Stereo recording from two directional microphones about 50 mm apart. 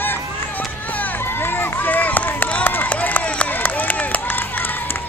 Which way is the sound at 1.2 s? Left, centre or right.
Left.